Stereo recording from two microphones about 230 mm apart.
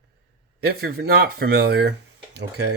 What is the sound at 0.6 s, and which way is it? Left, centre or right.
Speech, right.